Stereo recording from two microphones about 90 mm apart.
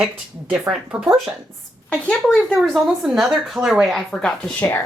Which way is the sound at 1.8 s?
10° left (ahead or behind).